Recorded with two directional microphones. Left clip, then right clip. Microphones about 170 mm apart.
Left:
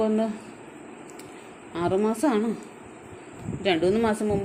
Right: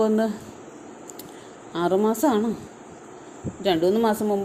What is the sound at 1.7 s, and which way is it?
Speech, 25° right (ahead or behind).